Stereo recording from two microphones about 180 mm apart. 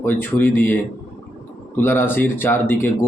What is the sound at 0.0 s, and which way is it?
A man's voice, 10° left (ahead or behind).